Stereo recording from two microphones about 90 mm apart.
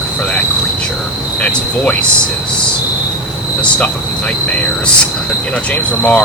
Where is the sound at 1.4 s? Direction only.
15° left (ahead or behind).